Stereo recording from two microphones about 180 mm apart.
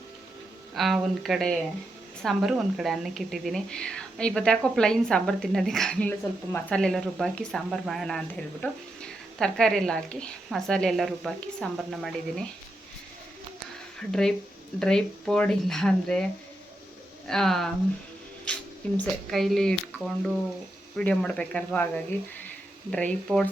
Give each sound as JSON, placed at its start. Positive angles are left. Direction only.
{"t": 0.8, "sound": "speech", "side_deg": 0}
{"t": 14.1, "sound": "speech", "side_deg": 5}
{"t": 17.2, "sound": "speech", "side_deg": 0}
{"t": 18.5, "sound": "a sound", "side_deg": 5}
{"t": 18.9, "sound": "speech", "side_deg": 0}